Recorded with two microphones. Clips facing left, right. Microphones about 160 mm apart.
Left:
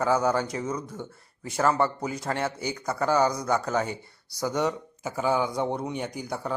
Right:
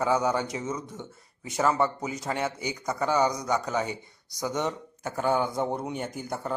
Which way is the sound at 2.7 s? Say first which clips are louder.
Left 2 dB; 15° right (ahead or behind).